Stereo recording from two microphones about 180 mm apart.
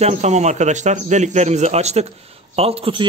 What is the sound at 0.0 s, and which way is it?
A man's voice, 35° right (ahead or behind).